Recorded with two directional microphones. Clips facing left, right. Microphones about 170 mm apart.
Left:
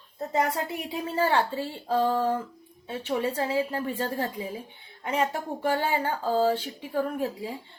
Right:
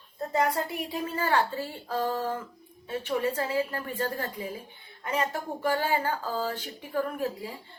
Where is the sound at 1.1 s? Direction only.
30° left (ahead or behind).